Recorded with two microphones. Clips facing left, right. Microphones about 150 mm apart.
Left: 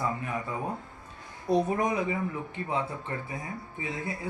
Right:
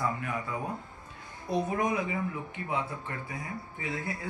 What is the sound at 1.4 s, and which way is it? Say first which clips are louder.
Speech: left 3 dB; 35° left (ahead or behind).